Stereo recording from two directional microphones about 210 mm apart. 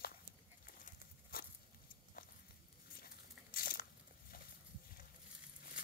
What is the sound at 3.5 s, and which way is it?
Biting, 45° left (ahead or behind).